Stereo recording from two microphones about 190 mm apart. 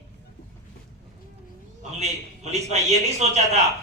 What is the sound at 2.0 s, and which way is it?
A man's voice, 35° right (ahead or behind).